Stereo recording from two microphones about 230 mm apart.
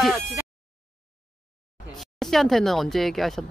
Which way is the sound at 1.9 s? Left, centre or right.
Centre.